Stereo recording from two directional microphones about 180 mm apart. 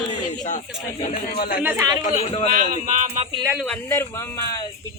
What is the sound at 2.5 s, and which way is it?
Speech, 45° right (ahead or behind).